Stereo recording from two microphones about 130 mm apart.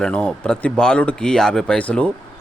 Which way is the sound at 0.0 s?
10° left (ahead or behind).